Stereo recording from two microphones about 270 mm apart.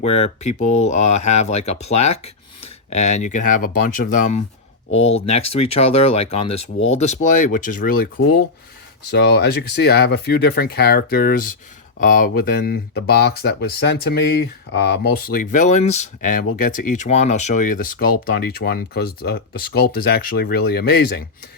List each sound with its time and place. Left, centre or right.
0.0 s speech: left
2.1 s a sound: left
2.9 s speech: left
9.1 s speech: left